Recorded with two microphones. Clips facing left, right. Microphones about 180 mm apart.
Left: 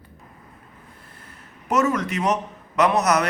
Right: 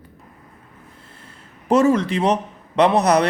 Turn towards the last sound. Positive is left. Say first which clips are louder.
# right 4 dB
turn(degrees=-30)  # may be behind; listen again after turning